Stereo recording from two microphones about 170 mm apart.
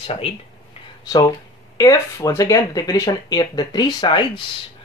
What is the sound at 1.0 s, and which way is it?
Speech, 20° left (ahead or behind).